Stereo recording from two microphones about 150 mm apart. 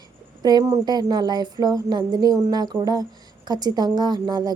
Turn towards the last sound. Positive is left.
turn(degrees=-30)  # may be behind; listen again after turning